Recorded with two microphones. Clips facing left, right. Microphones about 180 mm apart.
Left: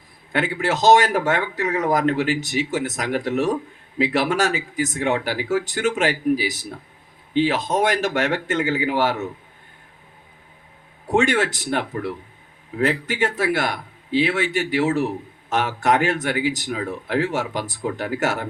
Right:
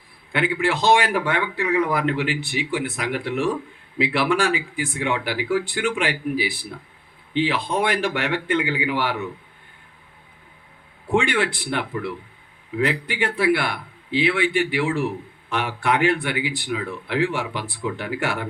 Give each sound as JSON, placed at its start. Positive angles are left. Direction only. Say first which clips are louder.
{"t": 0.3, "sound": "a man's voice", "louder": "even", "side_deg": 40}
{"t": 11.1, "sound": "a man's voice", "louder": "left 2 dB", "side_deg": 40}